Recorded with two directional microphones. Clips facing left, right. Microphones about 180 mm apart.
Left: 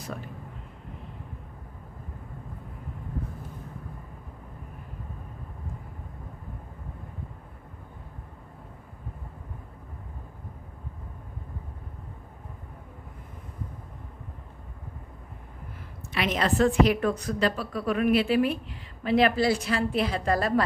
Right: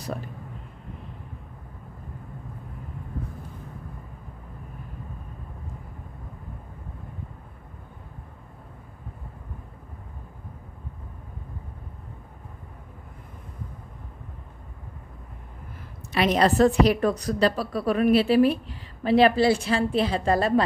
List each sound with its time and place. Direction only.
16.1 s a woman's voice: 35° right (ahead or behind)